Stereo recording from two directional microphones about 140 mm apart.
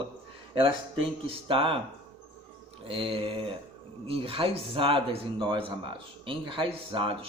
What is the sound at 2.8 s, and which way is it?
A man's voice, 40° right (ahead or behind).